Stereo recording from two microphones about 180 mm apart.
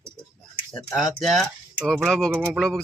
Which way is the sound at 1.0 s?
Centre (ahead or behind).